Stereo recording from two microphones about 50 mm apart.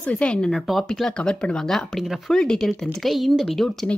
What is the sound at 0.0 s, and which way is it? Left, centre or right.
Speech, left.